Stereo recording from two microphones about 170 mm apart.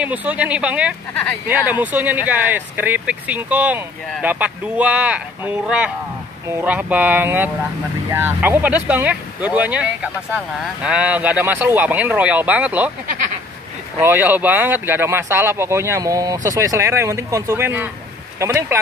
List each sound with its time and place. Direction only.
0.0 s speech: 10° right (ahead or behind)
13.9 s speech: 10° right (ahead or behind)